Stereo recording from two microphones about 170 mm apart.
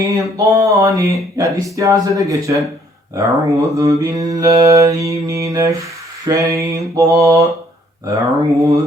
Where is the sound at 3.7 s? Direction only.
20° right (ahead or behind).